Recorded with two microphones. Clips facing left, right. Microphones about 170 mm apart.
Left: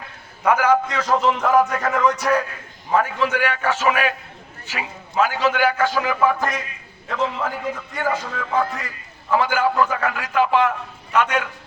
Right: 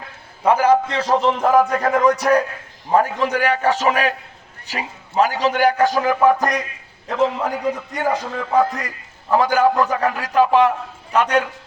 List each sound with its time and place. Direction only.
0.4 s a man's voice: 30° right (ahead or behind)
8.0 s speech: 15° right (ahead or behind)
8.4 s a man's voice: 40° right (ahead or behind)